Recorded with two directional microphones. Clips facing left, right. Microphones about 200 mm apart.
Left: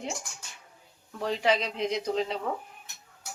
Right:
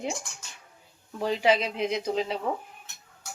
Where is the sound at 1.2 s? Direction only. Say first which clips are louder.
Right 3 dB; 5° right (ahead or behind).